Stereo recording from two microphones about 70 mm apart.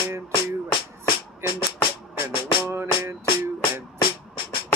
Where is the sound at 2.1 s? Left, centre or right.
Right.